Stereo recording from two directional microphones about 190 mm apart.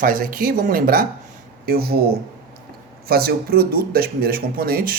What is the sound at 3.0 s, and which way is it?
Speech, 55° right (ahead or behind).